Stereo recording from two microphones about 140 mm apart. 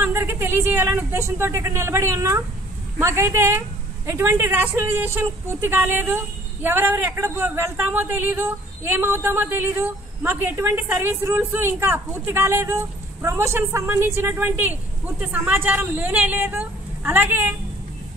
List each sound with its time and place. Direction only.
0.0 s speech: 15° right (ahead or behind)